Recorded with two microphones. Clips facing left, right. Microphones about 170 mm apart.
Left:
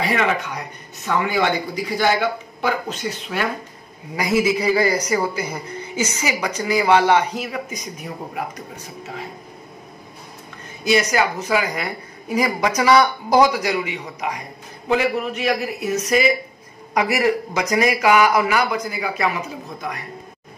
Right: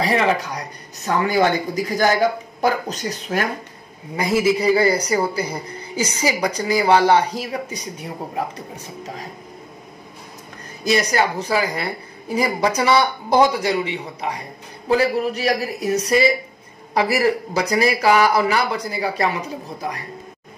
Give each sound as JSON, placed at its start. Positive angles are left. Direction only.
{"t": 0.0, "sound": "a woman's voice", "side_deg": -35}
{"t": 4.2, "sound": "a woman's voice", "side_deg": -30}
{"t": 10.8, "sound": "a woman's voice", "side_deg": -35}